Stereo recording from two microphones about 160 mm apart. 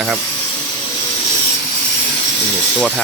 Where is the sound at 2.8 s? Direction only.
Centre (ahead or behind).